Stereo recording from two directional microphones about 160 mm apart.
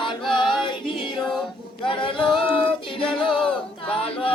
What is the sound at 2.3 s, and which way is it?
Child singing, 35° left (ahead or behind).